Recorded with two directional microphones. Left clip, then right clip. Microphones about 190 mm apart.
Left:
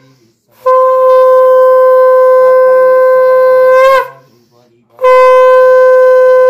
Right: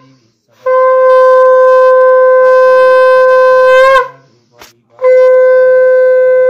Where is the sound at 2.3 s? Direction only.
60° left (ahead or behind).